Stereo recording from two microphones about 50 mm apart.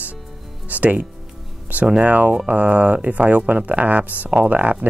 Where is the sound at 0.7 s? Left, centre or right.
Right.